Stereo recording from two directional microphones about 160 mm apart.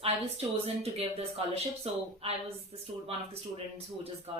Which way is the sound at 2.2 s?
40° right (ahead or behind).